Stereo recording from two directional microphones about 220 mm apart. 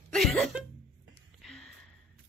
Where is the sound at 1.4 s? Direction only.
Centre (ahead or behind).